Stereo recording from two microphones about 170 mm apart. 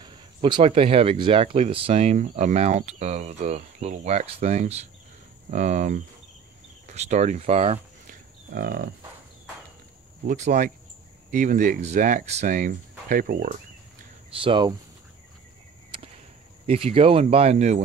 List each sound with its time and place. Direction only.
0.0 s speech: 30° right (ahead or behind)
8.1 s livestock: 60° right (ahead or behind)
10.2 s speech: 45° right (ahead or behind)
14.4 s speech: 30° right (ahead or behind)
16.6 s speech: 35° right (ahead or behind)